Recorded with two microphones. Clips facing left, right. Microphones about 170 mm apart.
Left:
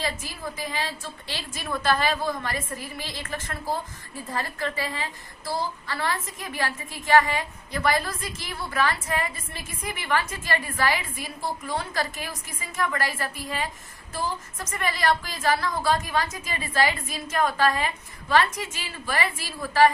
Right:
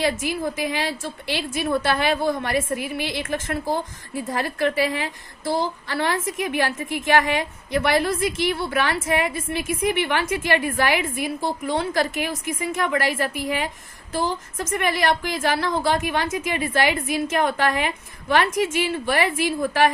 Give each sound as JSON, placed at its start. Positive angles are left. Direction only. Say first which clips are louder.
{"t": 0.0, "sound": "a woman's voice", "louder": "right 9 dB", "side_deg": -75}
{"t": 14.8, "sound": "a woman's voice", "louder": "right 3 dB", "side_deg": -70}